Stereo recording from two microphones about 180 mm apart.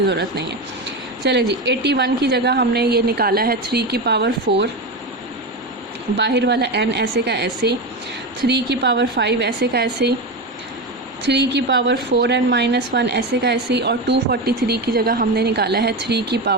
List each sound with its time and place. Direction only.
1.3 s a woman's voice: 70° right (ahead or behind)
6.1 s a woman's voice: 70° right (ahead or behind)
11.3 s a woman's voice: 70° right (ahead or behind)